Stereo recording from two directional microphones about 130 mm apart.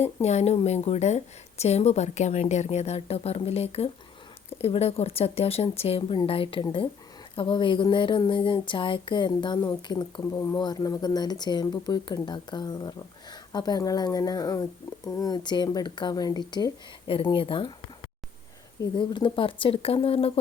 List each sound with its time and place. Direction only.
0.0 s a woman's voice: 55° left (ahead or behind)
18.8 s speech: 35° left (ahead or behind)